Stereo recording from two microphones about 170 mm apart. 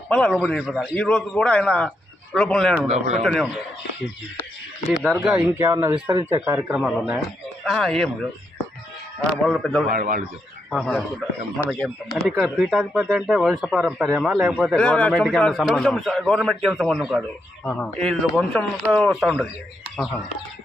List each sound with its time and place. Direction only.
0.1 s speech: 5° left (ahead or behind)
0.6 s speech: 5° right (ahead or behind)
4.9 s speech: centre (ahead or behind)
5.4 s speech: 15° right (ahead or behind)
6.7 s speech: centre (ahead or behind)
9.9 s a man's voice: 55° right (ahead or behind)
10.7 s speech: 5° left (ahead or behind)
17.7 s speech: 10° left (ahead or behind)